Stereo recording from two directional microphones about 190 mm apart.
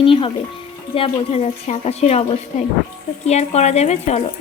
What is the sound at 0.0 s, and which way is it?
Speech, 30° left (ahead or behind).